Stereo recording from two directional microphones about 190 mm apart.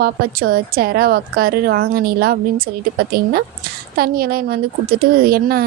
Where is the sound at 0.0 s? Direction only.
50° right (ahead or behind).